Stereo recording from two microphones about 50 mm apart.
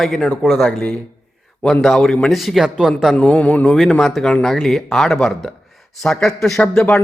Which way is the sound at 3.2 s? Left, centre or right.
Left.